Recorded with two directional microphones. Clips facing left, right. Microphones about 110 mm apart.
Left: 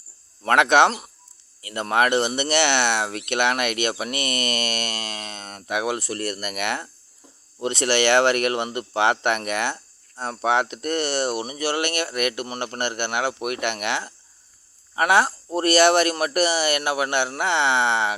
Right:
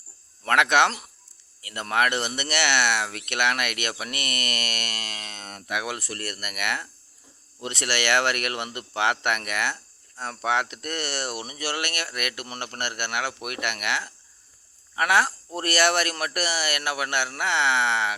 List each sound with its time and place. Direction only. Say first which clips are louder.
0.4 s speech: left 4 dB; 25° left (ahead or behind)